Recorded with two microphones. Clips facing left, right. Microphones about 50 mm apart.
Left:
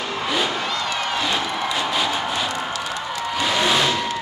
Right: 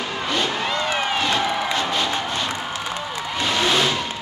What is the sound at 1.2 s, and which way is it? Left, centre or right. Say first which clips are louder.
Music: right 2 dB; centre.